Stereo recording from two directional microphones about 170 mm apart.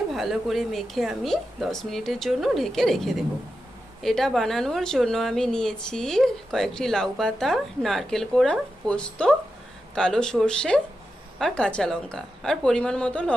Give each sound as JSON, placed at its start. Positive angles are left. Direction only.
{"t": 0.1, "sound": "a woman's voice", "side_deg": 0}